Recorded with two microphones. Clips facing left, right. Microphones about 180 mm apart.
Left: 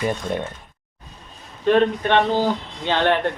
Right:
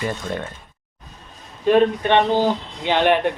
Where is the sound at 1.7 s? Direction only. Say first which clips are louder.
Right 1 dB; 15° right (ahead or behind).